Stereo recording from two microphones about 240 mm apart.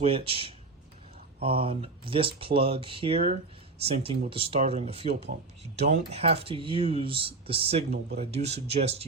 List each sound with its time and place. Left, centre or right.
0.0 s speech: right